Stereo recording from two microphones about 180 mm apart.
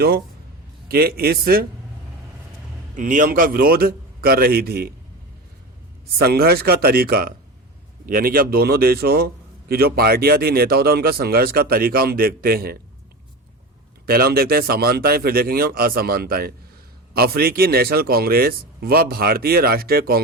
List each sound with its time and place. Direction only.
0.9 s a man's voice: 60° right (ahead or behind)
2.9 s a man's voice: 45° right (ahead or behind)
6.1 s a man's voice: 60° right (ahead or behind)
14.1 s a man's voice: 55° right (ahead or behind)